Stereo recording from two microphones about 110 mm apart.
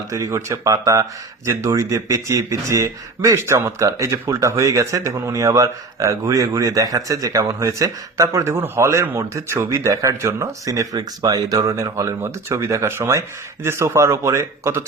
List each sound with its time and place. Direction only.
0.1 s speech: 30° right (ahead or behind)